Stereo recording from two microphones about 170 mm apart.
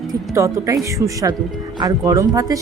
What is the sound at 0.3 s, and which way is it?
Speech, 20° right (ahead or behind).